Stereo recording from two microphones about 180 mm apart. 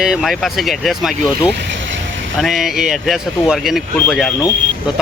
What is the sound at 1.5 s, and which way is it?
Vehicle, 80° right.